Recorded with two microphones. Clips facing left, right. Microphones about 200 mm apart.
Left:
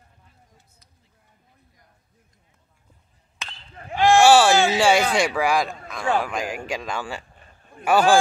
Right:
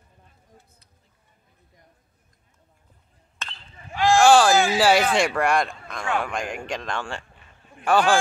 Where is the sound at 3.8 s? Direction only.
55° left (ahead or behind).